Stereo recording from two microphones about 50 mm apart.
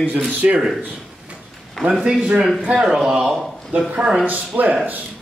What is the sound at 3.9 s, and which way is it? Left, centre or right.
Speech, centre.